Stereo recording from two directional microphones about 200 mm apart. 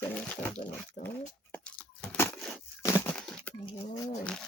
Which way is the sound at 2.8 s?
15° left (ahead or behind).